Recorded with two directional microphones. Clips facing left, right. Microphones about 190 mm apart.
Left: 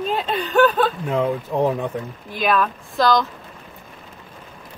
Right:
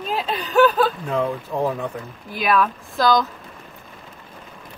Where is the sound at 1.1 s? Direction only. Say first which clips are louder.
Left 2 dB; 20° left (ahead or behind).